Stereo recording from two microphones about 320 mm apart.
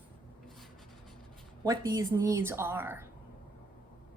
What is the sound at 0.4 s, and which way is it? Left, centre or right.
Writing, centre.